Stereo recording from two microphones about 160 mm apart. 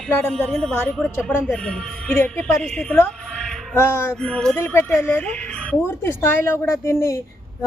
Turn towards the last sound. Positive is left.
turn(degrees=15)  # may be behind; listen again after turning